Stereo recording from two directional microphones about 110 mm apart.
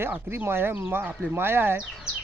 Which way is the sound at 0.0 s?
20° right (ahead or behind).